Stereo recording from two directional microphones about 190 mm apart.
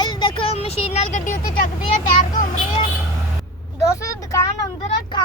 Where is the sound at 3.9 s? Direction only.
15° left (ahead or behind).